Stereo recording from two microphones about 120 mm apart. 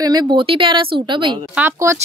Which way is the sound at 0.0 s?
35° right (ahead or behind).